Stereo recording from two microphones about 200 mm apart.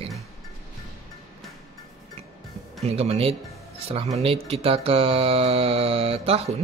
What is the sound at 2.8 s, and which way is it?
Speech, 30° right (ahead or behind).